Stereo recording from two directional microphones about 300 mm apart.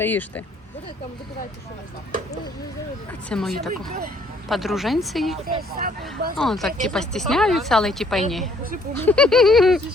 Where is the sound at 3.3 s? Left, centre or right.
Centre.